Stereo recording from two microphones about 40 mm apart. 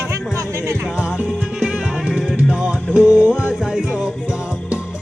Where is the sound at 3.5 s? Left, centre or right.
Centre.